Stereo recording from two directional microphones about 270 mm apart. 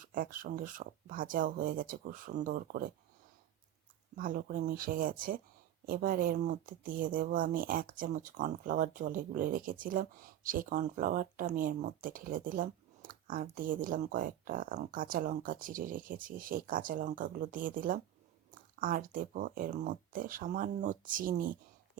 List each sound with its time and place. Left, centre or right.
0.0 s speech: right
4.2 s speech: right